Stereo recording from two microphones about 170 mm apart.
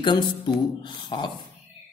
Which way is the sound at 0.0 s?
25° left (ahead or behind).